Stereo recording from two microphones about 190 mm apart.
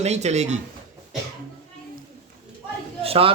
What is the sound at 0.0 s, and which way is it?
Speech, 35° right (ahead or behind).